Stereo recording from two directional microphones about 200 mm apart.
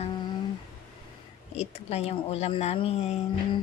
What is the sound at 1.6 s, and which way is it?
Speech, 30° left (ahead or behind).